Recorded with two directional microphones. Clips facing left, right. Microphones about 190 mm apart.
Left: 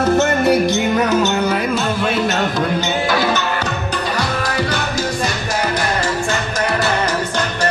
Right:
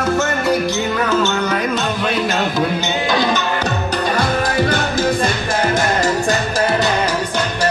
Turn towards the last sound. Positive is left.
turn(degrees=-35)  # may be behind; listen again after turning